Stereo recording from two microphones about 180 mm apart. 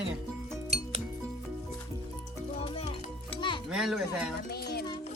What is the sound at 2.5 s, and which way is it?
Music, 30° left (ahead or behind).